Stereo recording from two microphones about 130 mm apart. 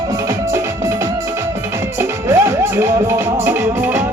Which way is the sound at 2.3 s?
20° right (ahead or behind).